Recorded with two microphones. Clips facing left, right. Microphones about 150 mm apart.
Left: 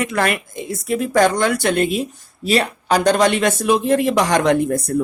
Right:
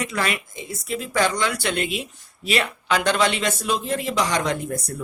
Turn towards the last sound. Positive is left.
turn(degrees=60)  # may be behind; listen again after turning